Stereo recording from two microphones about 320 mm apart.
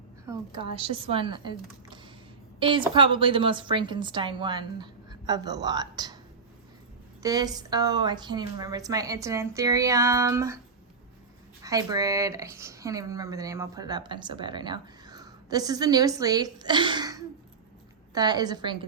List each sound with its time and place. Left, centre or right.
0.3 s a woman's voice: centre
7.2 s speech: centre
11.6 s speech: centre